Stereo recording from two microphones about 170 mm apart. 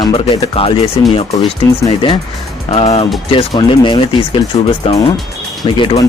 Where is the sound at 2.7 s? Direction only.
35° left (ahead or behind).